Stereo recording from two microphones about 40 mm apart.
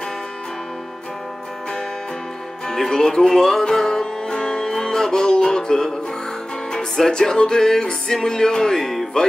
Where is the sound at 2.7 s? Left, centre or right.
Centre.